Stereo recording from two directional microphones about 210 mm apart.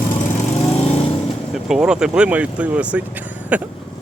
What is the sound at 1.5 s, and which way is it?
Speech, centre (ahead or behind).